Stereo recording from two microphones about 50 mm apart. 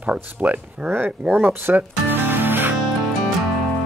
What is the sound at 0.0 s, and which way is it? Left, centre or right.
Speech, right.